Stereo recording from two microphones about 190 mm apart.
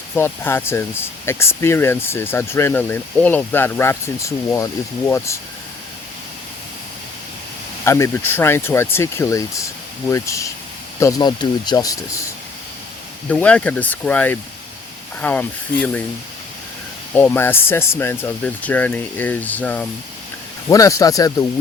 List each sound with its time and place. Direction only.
0.2 s speech: 10° left (ahead or behind)
7.9 s speech: 15° left (ahead or behind)
13.3 s speech: 5° left (ahead or behind)
17.2 s speech: 10° left (ahead or behind)